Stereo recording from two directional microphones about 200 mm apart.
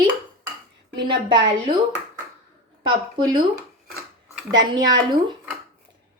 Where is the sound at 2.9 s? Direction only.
20° right (ahead or behind).